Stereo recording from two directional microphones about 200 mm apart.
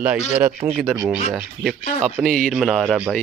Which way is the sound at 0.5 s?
30° right (ahead or behind).